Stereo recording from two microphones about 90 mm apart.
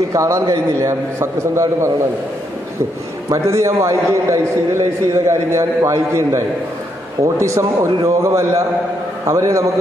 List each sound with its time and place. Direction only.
0.1 s a man's voice: 35° right (ahead or behind)
3.3 s a man's voice: 35° right (ahead or behind)